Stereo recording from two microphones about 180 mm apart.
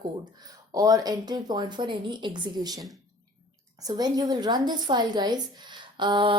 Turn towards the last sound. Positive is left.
turn(degrees=-25)  # may be behind; listen again after turning